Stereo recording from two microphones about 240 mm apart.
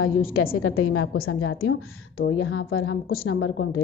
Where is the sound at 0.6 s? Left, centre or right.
Left.